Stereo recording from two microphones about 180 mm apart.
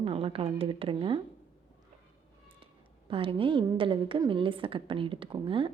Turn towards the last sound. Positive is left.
turn(degrees=-30)  # may be behind; listen again after turning